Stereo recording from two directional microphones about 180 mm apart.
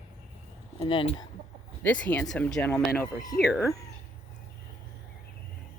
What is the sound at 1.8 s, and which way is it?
Speech, 5° left (ahead or behind).